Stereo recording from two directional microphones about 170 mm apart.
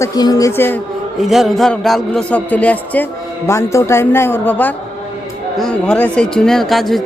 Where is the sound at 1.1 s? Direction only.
Centre (ahead or behind).